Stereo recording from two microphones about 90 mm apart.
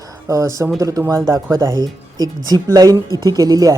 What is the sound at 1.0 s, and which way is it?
Speech, 25° right (ahead or behind).